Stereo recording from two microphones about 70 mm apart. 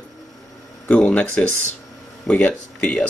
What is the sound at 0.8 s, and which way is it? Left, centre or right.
Speech, centre.